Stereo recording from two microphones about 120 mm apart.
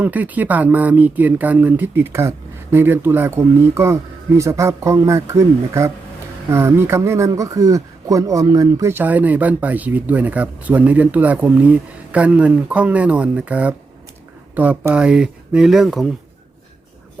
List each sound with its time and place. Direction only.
0.0 s speech: 15° right (ahead or behind)